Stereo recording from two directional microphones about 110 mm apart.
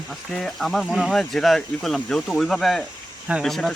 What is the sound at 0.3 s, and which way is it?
Speech, 5° left (ahead or behind).